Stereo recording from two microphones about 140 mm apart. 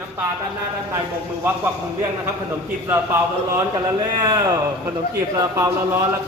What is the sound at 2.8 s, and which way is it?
A man's voice, 15° right (ahead or behind).